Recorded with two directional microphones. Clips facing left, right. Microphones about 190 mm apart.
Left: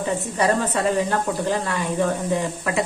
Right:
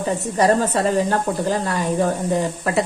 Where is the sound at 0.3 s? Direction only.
40° right (ahead or behind).